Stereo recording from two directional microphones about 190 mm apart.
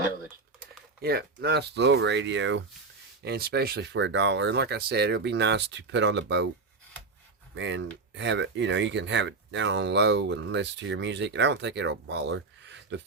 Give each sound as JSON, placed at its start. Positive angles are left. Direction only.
{"t": 1.0, "sound": "speech", "side_deg": -60}
{"t": 3.2, "sound": "speech", "side_deg": -55}
{"t": 7.5, "sound": "speech", "side_deg": -75}